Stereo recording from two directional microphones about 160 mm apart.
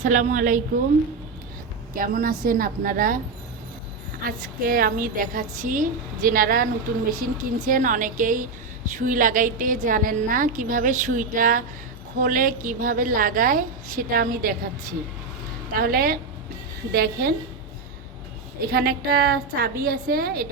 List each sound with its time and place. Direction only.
0.0 s a woman's voice: 50° right (ahead or behind)
2.0 s a woman's voice: 60° right (ahead or behind)
4.2 s a woman's voice: 65° right (ahead or behind)
18.7 s a woman's voice: 70° right (ahead or behind)